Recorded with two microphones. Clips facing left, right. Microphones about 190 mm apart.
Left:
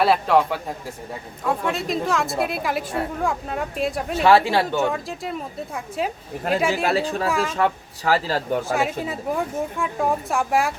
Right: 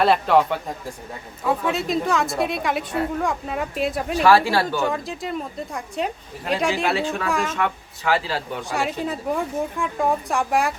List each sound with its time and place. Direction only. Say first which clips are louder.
0.0 s speech: right 1 dB; centre (ahead or behind)
4.2 s speech: left 1 dB; 25° left (ahead or behind)
4.8 s speech: left 1 dB; centre (ahead or behind)
6.8 s speech: left 1 dB; 35° left (ahead or behind)
7.3 s speech: left 1 dB; centre (ahead or behind)
7.5 s speech: left 3 dB; 35° left (ahead or behind)
9.0 s speech: right 1 dB; centre (ahead or behind)